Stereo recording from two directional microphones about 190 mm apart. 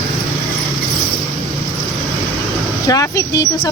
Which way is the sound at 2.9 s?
20° left (ahead or behind).